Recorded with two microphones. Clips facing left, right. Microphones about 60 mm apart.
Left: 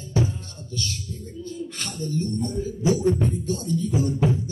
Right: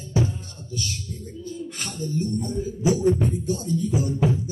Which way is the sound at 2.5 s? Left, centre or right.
Centre.